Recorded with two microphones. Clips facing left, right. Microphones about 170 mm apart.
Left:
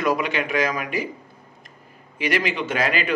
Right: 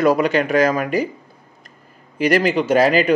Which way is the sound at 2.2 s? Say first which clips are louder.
Right 7 dB; 40° right (ahead or behind).